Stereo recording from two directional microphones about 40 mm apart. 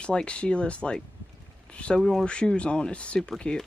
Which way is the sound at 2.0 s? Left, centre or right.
Centre.